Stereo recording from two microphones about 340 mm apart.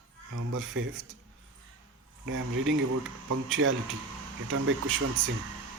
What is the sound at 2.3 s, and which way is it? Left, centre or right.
Speech, right.